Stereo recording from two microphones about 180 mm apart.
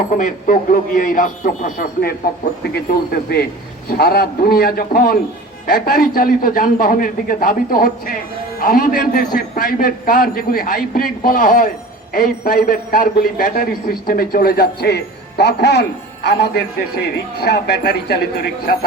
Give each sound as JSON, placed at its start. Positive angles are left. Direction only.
{"t": 0.2, "sound": "a man's voice", "side_deg": 50}